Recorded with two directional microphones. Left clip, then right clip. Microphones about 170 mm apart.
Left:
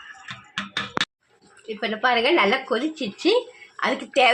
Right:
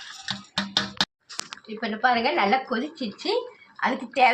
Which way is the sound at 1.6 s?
55° left (ahead or behind).